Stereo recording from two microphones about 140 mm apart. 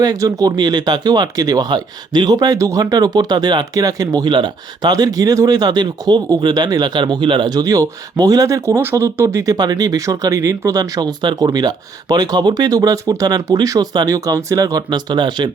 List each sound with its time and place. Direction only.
0.0 s speech: 25° right (ahead or behind)